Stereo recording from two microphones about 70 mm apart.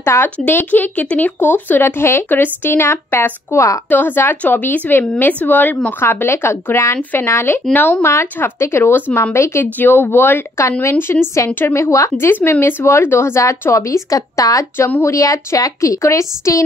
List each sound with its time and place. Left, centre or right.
0.0 s speech: left
3.5 s a woman's voice: left
3.9 s speech: left
7.0 s speech: left
7.2 s speech: left
7.7 s speech: left
8.1 s speech: left
9.8 s speech: left
12.3 s a woman's voice: left